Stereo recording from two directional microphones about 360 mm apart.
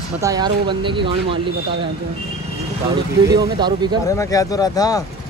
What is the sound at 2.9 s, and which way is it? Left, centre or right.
Speech, centre.